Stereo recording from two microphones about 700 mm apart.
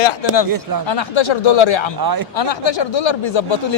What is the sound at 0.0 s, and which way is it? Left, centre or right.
Speech, left.